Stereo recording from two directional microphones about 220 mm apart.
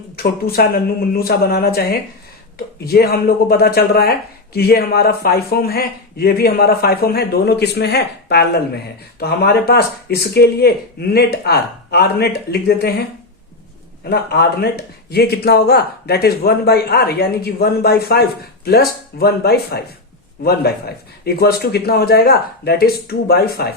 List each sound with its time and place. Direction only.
0.2 s speech: 45° left (ahead or behind)
14.0 s speech: 45° left (ahead or behind)